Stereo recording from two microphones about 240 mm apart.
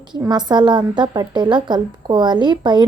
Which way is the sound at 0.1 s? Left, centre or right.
Centre.